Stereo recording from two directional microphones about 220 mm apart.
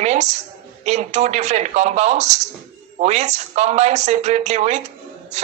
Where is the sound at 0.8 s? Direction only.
30° right (ahead or behind).